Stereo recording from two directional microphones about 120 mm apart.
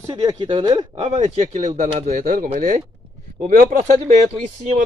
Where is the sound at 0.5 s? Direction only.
35° right (ahead or behind).